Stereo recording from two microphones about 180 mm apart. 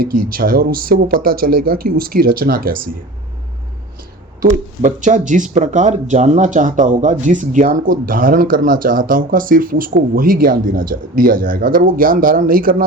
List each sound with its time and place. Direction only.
0.0 s speech: 55° right (ahead or behind)
4.4 s speech: 45° right (ahead or behind)